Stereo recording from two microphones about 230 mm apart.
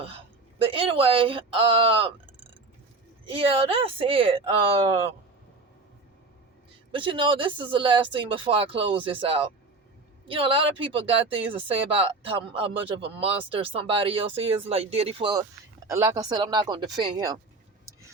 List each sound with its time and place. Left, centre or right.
0.6 s speech: right
3.2 s speech: right
6.9 s speech: right